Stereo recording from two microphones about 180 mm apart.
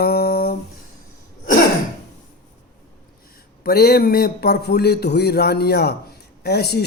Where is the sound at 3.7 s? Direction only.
60° left (ahead or behind).